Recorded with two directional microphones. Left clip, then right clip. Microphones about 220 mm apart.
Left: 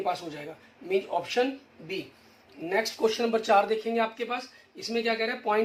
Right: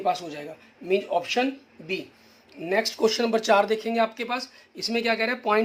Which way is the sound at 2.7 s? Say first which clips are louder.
Right 3 dB; 50° right (ahead or behind).